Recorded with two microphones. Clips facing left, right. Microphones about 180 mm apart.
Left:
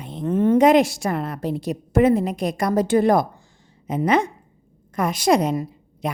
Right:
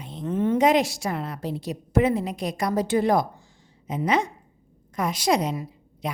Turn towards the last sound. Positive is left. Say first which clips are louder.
# left 7 dB
turn(degrees=50)  # may be behind; listen again after turning